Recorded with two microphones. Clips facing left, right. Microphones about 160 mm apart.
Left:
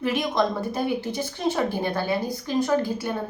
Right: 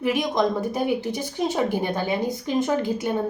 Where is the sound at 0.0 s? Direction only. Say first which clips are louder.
Right 2 dB; 15° right (ahead or behind).